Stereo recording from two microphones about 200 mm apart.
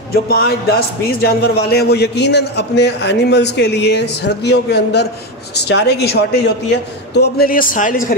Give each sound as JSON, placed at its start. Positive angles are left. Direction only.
{"t": 0.1, "sound": "a man's voice", "side_deg": 50}